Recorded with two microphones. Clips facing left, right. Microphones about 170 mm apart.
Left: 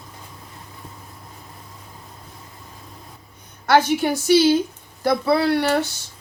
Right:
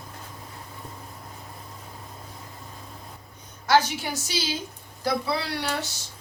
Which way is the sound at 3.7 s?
55° left (ahead or behind).